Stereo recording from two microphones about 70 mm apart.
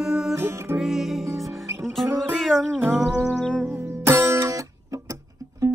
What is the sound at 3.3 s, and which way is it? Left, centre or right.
Music, centre.